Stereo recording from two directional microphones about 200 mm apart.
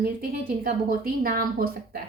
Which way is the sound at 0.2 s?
45° right (ahead or behind).